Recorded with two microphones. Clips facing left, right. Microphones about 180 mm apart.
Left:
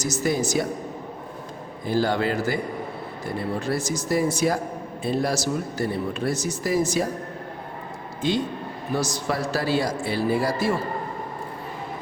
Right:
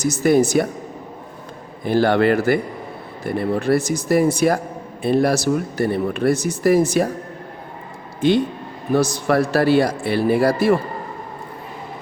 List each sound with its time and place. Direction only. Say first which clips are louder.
0.0 s speech: right 8 dB; 60° right (ahead or behind)
1.8 s speech: right 7 dB; 65° right (ahead or behind)
9.0 s speech: right 9 dB; 60° right (ahead or behind)